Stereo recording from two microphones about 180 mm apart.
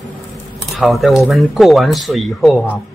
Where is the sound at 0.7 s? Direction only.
Centre (ahead or behind).